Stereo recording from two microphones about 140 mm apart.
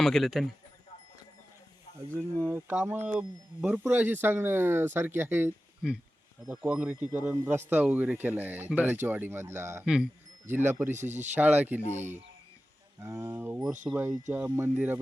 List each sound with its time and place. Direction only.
0.0 s a man's voice: centre (ahead or behind)
2.0 s speech: 15° right (ahead or behind)
9.8 s speech: 5° right (ahead or behind)
10.9 s speech: 60° right (ahead or behind)
11.3 s speech: 10° right (ahead or behind)